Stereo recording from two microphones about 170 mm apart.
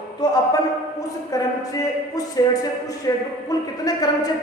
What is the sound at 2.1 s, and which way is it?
Speech, 20° left (ahead or behind).